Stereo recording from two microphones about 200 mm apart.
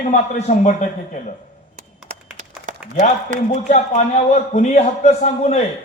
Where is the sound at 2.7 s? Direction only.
40° right (ahead or behind).